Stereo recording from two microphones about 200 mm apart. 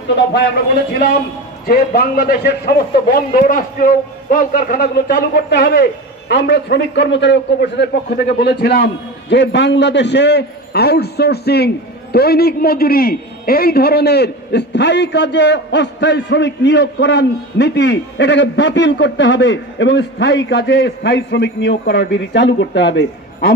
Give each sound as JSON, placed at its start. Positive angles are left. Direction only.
{"t": 1.7, "sound": "a man's voice", "side_deg": 50}